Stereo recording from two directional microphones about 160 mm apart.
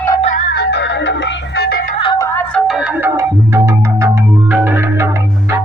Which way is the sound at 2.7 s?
5° right (ahead or behind).